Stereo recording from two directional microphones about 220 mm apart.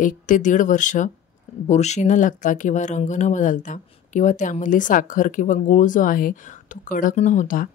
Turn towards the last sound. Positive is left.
turn(degrees=35)  # may be behind; listen again after turning